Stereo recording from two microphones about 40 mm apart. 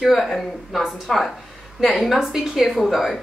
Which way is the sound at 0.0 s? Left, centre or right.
Centre.